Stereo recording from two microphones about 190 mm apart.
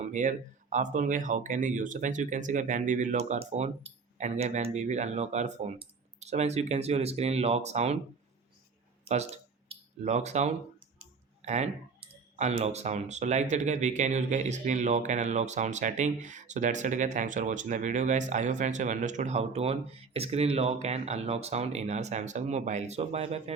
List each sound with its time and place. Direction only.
0.0 s speech: 40° right (ahead or behind)
9.0 s a sound: 35° right (ahead or behind)
11.4 s speech: 35° right (ahead or behind)